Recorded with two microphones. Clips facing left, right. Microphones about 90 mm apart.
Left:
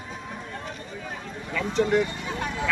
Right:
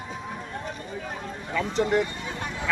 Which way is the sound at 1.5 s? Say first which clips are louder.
Left 1 dB; 10° right (ahead or behind).